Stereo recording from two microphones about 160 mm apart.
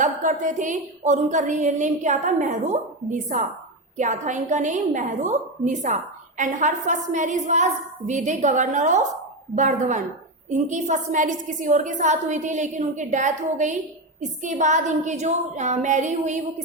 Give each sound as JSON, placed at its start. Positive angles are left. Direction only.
{"t": 0.0, "sound": "a woman's voice", "side_deg": -55}